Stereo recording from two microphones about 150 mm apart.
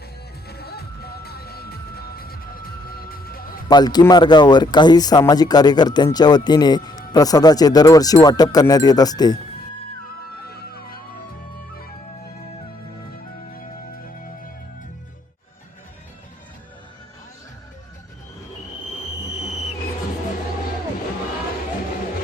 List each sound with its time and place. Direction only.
0.4 s music: 90° left
3.7 s speech: 25° left (ahead or behind)